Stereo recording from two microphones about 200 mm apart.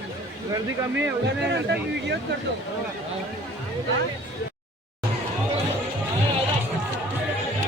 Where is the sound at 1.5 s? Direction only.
60° right (ahead or behind).